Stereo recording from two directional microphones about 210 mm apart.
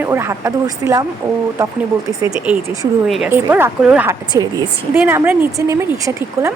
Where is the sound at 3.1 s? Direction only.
5° right (ahead or behind).